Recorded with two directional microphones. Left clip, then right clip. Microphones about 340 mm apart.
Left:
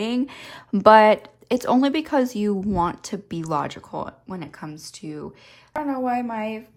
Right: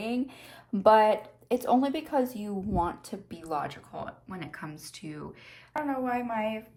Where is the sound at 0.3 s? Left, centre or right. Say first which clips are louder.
Left 8 dB; left.